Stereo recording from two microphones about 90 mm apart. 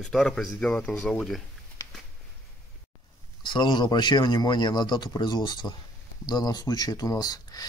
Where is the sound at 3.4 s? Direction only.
60° left (ahead or behind).